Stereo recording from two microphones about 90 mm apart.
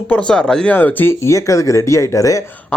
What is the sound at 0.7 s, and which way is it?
Speech, 20° left (ahead or behind).